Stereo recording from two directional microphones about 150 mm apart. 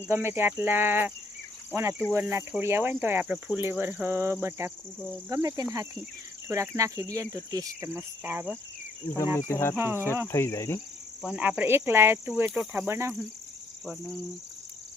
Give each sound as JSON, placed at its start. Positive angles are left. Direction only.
{"t": 0.0, "sound": "speech", "side_deg": -15}
{"t": 9.5, "sound": "cricket", "side_deg": 15}
{"t": 9.7, "sound": "speech", "side_deg": -15}
{"t": 10.2, "sound": "cricket", "side_deg": 15}
{"t": 11.2, "sound": "speech", "side_deg": -5}